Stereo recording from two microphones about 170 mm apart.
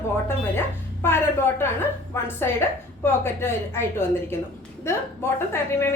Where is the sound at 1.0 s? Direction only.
15° left (ahead or behind).